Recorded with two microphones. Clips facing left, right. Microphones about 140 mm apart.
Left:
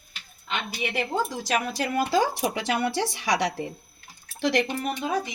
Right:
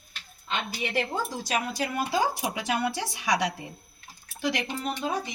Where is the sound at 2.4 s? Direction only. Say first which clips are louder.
Left 3 dB; 65° left (ahead or behind).